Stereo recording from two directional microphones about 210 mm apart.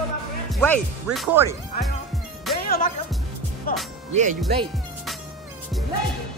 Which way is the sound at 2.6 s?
45° left (ahead or behind).